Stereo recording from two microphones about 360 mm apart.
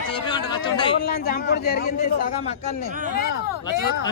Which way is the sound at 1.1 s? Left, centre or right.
Left.